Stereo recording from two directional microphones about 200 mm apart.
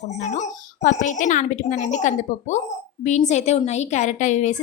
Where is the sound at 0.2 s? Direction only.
35° left (ahead or behind).